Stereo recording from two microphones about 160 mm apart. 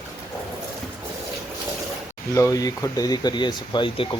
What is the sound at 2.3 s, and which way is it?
Speech, 20° left (ahead or behind).